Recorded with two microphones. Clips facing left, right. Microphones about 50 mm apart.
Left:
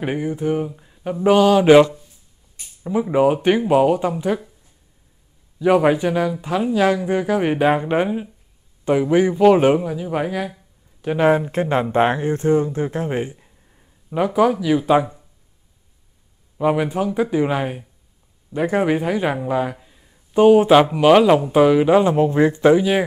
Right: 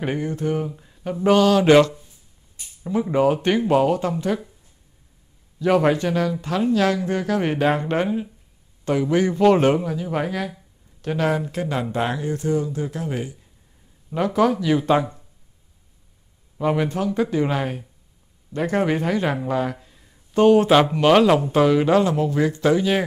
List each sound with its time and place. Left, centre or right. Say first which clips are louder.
0.0 s speech: left 2 dB; centre
5.6 s a man's voice: left 3 dB; centre
11.1 s speech: left 6 dB; left
14.1 s speech: left 2 dB; centre
16.5 s a man's voice: left 3 dB; centre
22.1 s speech: left 5 dB; left
22.8 s speech: left 3 dB; centre